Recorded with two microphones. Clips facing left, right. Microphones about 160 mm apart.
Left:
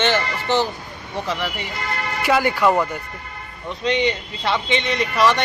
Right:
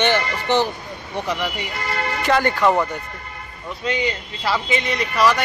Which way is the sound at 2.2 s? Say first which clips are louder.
Even; 10° left (ahead or behind).